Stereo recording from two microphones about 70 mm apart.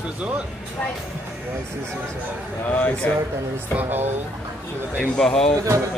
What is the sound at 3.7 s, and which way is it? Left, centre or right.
Speech, right.